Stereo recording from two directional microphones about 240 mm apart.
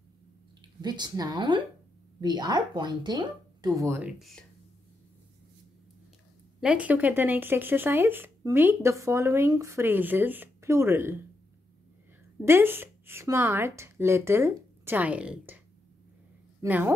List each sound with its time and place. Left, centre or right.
0.8 s speech: centre
4.2 s speech: centre
6.6 s speech: centre
12.4 s speech: centre
16.6 s speech: centre